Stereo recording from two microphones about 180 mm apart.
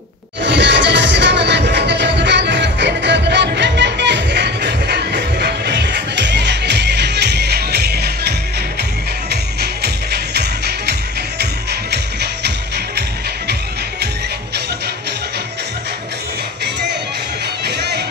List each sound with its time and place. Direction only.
0.4 s music: 85° right; by 8.4 s 65° right (ahead or behind)
10.1 s music: 65° right (ahead or behind)
17.6 s music: 65° right (ahead or behind)